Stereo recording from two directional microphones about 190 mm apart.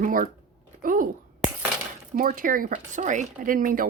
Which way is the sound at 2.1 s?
45° right (ahead or behind).